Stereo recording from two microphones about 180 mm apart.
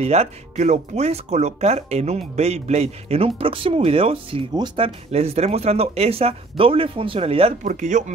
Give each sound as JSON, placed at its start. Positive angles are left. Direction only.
{"t": 0.0, "sound": "speech", "side_deg": -35}